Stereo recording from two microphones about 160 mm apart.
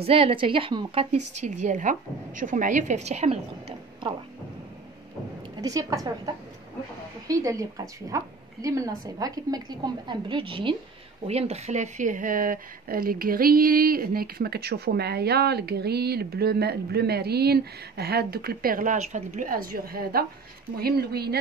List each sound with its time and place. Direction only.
0.0 s a woman's voice: 35° right (ahead or behind)
1.4 s a woman's voice: 50° right (ahead or behind)
5.6 s a woman's voice: 20° right (ahead or behind); by 21.4 s 80° right